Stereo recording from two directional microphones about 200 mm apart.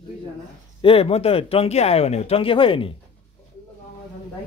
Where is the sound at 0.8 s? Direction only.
30° left (ahead or behind).